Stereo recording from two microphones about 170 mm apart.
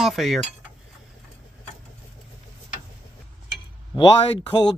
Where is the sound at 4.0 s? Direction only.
25° left (ahead or behind).